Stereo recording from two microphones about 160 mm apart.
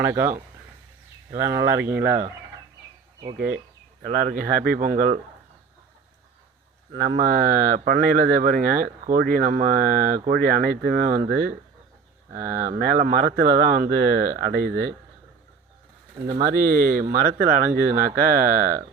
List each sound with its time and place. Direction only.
0.0 s speech: 15° right (ahead or behind)
1.4 s speech: 15° right (ahead or behind)
4.0 s speech: 60° right (ahead or behind)
7.0 s speech: 70° right (ahead or behind)
16.3 s speech: 65° right (ahead or behind)